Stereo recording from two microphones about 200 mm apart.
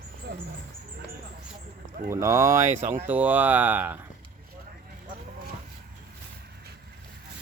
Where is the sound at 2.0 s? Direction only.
15° right (ahead or behind).